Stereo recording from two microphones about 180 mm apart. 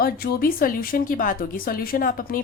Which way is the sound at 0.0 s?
55° left (ahead or behind).